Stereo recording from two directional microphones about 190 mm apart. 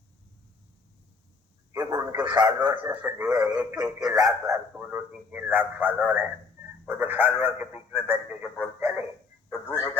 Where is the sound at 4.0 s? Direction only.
20° right (ahead or behind).